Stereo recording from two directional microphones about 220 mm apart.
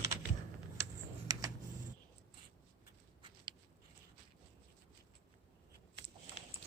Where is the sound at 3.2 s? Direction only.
20° right (ahead or behind).